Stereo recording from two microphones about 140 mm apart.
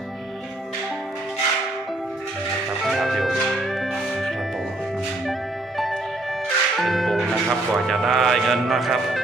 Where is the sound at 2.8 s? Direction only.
Centre (ahead or behind).